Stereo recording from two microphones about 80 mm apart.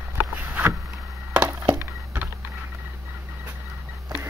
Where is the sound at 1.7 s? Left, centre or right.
Right.